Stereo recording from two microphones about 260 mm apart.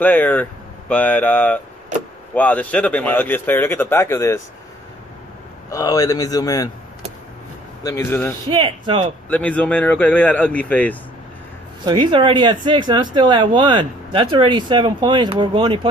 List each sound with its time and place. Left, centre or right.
0.0 s a man's voice: centre
5.7 s a man's voice: centre
7.8 s a man's voice: centre
8.5 s speech: centre
9.3 s a man's voice: centre
11.8 s speech: centre